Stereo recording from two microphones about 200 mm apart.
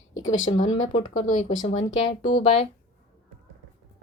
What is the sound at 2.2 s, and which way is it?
Speech, 30° left (ahead or behind).